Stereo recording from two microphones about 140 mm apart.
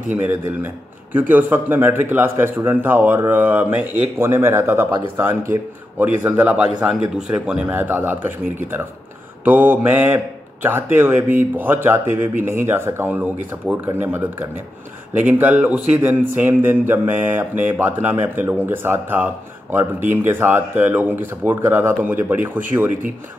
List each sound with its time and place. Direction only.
0.1 s a man's voice: 15° right (ahead or behind)